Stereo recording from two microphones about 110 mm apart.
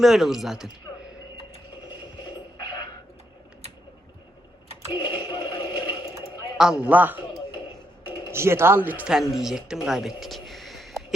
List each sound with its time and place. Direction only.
0.0 s speech: 5° right (ahead or behind)
4.9 s radio: 30° left (ahead or behind)
6.6 s a man's voice: 5° right (ahead or behind)
8.3 s a man's voice: 25° right (ahead or behind)
9.3 s speech: 5° right (ahead or behind)